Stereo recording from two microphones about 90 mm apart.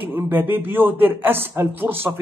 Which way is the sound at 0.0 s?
20° right (ahead or behind).